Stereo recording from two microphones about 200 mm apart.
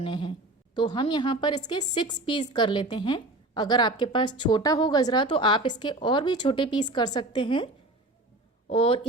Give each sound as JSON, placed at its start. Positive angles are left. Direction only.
{"t": 0.0, "sound": "a woman's voice", "side_deg": 25}
{"t": 8.7, "sound": "a woman's voice", "side_deg": 30}